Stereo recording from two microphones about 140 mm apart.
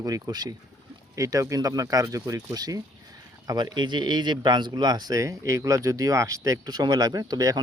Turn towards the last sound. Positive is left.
turn(degrees=-30)  # may be behind; listen again after turning